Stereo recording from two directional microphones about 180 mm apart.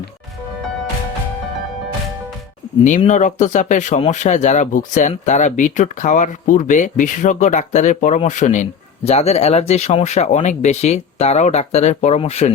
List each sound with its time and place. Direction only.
3.0 s speech: 40° left (ahead or behind)